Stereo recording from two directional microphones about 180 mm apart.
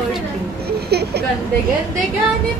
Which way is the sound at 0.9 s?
65° right (ahead or behind).